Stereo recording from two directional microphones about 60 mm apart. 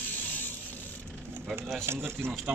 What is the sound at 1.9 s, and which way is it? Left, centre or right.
Speech, right.